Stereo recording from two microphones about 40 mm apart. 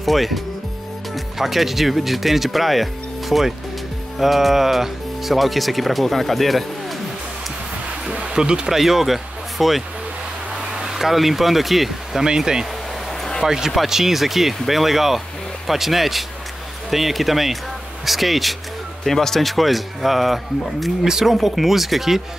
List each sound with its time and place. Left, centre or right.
0.0 s speech: centre
8.1 s a sound: right
8.6 s speech: centre
12.2 s speech: centre
21.1 s speech: centre
21.4 s speech: centre